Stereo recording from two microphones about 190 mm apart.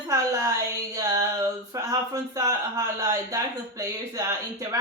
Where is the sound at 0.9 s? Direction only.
15° right (ahead or behind).